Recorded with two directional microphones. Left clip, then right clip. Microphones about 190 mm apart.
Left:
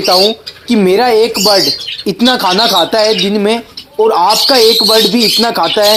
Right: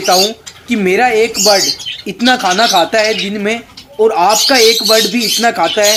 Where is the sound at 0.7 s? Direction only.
20° left (ahead or behind).